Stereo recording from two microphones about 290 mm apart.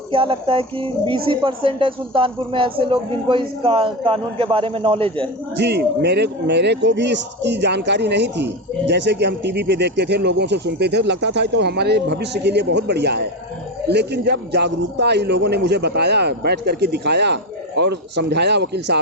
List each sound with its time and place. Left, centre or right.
0.1 s speech: centre
5.5 s a man's voice: right